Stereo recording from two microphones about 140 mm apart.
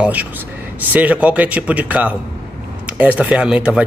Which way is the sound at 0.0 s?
10° right (ahead or behind).